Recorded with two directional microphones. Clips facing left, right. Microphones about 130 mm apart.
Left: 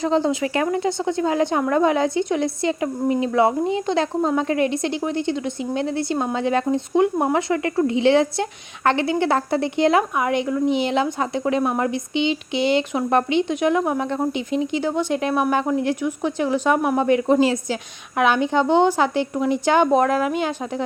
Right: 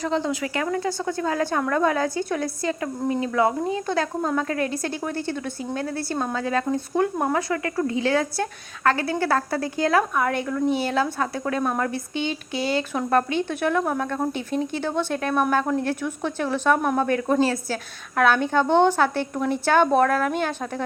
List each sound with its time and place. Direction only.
0.0 s speech: 30° left (ahead or behind); by 20.8 s 10° left (ahead or behind)